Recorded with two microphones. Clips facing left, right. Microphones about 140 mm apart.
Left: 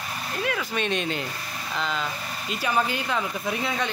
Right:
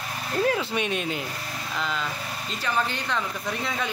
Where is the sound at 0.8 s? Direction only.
5° right (ahead or behind).